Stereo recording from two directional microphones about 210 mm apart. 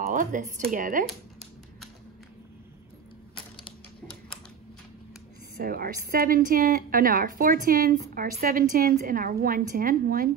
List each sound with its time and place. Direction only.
0.0 s speech: 40° right (ahead or behind)
5.6 s a woman's voice: 45° right (ahead or behind)